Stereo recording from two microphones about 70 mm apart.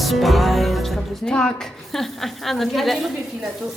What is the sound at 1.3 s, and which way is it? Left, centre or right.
Music, centre.